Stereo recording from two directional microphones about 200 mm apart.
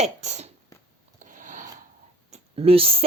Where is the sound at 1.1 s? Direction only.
40° right (ahead or behind).